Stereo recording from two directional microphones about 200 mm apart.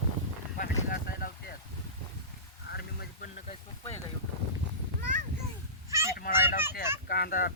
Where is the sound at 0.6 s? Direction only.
45° left (ahead or behind).